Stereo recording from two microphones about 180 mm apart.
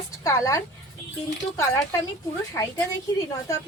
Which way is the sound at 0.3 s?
15° left (ahead or behind).